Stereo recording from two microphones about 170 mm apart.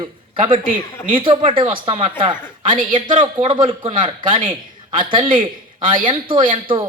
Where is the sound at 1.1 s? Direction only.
30° right (ahead or behind).